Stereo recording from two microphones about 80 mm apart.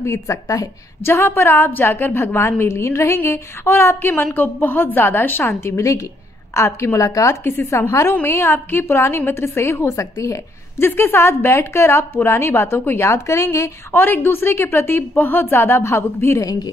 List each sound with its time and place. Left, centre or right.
0.0 s a woman's voice: left
1.0 s a woman's voice: left
7.4 s a woman's voice: left
8.1 s a woman's voice: left
10.9 s a woman's voice: left
13.9 s a woman's voice: left
16.3 s speech: left